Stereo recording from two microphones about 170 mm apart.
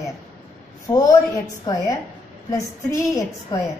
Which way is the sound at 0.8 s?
20° left (ahead or behind).